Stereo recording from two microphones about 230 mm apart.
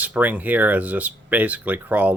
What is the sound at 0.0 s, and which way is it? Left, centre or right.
Speech, centre.